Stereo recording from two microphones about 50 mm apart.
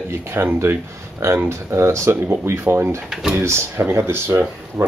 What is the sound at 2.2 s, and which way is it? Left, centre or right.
Speech, right.